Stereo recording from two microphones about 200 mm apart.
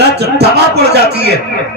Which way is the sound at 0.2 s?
55° right (ahead or behind).